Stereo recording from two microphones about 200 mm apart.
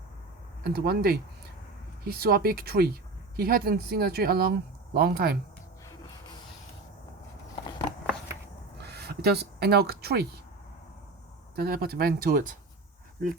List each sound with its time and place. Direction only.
0.6 s speech: 50° right (ahead or behind)
8.8 s a sound: 55° right (ahead or behind)
11.5 s speech: 50° right (ahead or behind)